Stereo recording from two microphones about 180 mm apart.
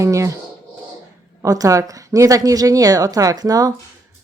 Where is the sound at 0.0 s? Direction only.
15° right (ahead or behind).